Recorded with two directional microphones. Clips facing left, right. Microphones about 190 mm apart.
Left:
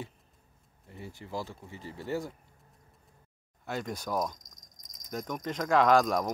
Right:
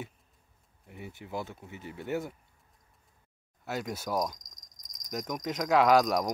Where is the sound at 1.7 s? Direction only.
65° right (ahead or behind).